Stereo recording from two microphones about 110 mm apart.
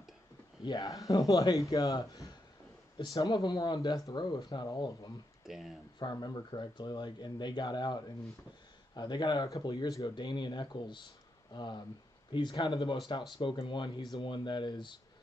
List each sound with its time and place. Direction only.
0.7 s speech: 30° left (ahead or behind)
5.4 s speech: 5° right (ahead or behind)
5.9 s speech: 40° left (ahead or behind)